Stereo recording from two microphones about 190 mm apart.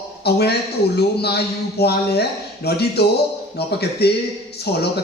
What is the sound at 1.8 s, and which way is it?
Speech, 55° left (ahead or behind).